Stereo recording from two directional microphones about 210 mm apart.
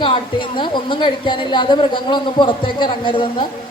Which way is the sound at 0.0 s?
25° left (ahead or behind).